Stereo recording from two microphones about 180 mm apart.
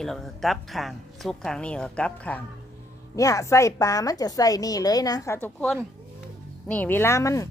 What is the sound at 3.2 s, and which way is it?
A woman's voice, 20° left (ahead or behind).